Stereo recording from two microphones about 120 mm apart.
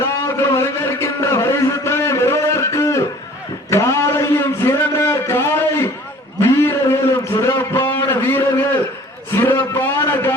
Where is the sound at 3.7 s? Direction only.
25° left (ahead or behind).